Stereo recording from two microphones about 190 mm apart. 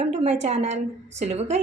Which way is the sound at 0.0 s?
35° right (ahead or behind).